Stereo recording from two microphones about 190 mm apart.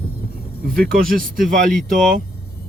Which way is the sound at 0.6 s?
50° right (ahead or behind).